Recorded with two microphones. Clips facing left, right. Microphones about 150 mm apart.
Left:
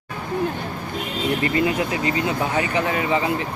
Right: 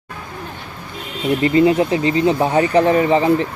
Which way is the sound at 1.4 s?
30° right (ahead or behind).